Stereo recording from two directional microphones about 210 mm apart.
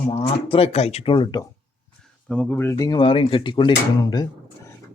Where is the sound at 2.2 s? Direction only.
5° left (ahead or behind).